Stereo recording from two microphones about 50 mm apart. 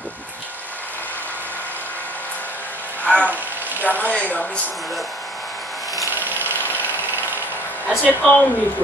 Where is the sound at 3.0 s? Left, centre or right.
Left.